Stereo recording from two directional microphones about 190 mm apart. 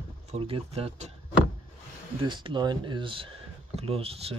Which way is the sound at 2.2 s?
25° right (ahead or behind).